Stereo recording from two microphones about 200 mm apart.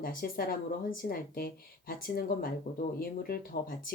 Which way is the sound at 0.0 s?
45° left (ahead or behind).